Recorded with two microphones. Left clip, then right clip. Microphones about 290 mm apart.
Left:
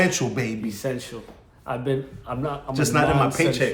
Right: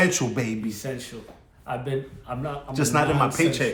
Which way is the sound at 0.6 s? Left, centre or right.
Centre.